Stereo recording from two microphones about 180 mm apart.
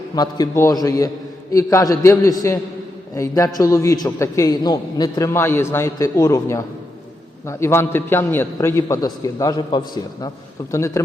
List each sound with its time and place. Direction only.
0.2 s a man's voice: 20° left (ahead or behind)